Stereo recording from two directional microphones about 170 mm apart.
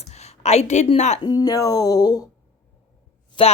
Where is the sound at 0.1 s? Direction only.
40° left (ahead or behind).